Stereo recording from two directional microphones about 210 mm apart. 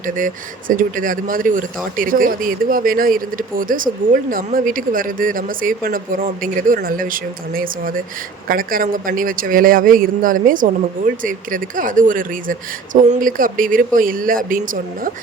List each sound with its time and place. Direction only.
0.0 s speech: 40° right (ahead or behind)